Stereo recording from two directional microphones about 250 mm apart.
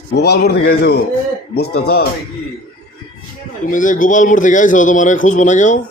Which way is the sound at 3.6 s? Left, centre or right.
Left.